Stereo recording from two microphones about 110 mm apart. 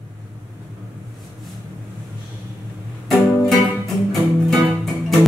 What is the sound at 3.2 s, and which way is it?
Music, centre (ahead or behind).